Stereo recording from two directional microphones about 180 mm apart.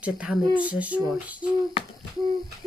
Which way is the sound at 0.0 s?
5° right (ahead or behind).